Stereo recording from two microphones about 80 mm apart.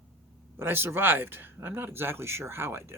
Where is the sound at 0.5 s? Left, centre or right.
Right.